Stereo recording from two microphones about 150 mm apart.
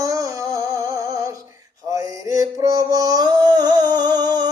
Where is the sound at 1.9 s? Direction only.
25° right (ahead or behind).